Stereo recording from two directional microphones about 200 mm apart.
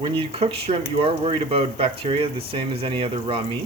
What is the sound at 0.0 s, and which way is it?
Speech, 30° right (ahead or behind).